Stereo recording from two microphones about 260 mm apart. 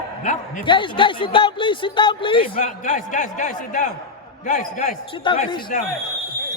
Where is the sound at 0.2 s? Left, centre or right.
Left.